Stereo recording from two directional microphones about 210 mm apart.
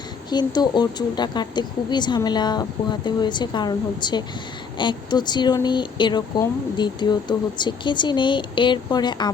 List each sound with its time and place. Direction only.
0.3 s speech: 20° left (ahead or behind)